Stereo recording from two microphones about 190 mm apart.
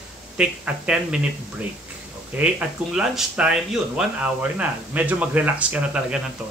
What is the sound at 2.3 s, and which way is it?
A man's voice, 5° right (ahead or behind).